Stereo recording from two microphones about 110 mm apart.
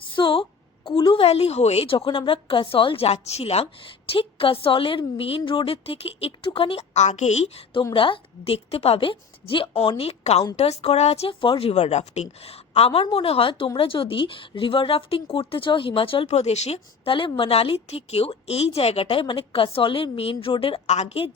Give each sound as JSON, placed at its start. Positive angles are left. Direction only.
{"t": 0.2, "sound": "a sound", "side_deg": 50}
{"t": 0.9, "sound": "a woman's voice", "side_deg": 45}
{"t": 4.1, "sound": "a woman's voice", "side_deg": 55}
{"t": 10.0, "sound": "a woman's voice", "side_deg": 70}
{"t": 20.8, "sound": "a woman's voice", "side_deg": 90}